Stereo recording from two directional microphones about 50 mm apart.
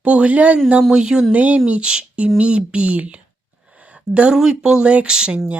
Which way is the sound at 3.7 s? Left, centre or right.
Right.